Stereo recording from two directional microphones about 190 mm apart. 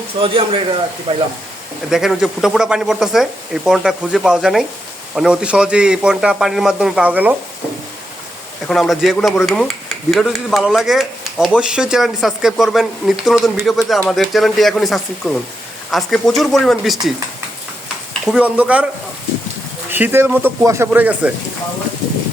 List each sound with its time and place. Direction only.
0.2 s speech: 30° right (ahead or behind)
1.9 s speech: centre (ahead or behind)
8.6 s speech: centre (ahead or behind)
18.3 s speech: 5° right (ahead or behind)
19.9 s speech: 10° right (ahead or behind)